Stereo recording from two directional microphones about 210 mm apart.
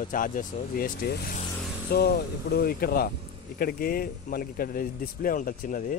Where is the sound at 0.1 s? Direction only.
40° left (ahead or behind).